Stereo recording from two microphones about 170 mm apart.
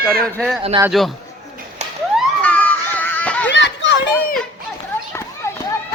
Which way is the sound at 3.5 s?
90° left.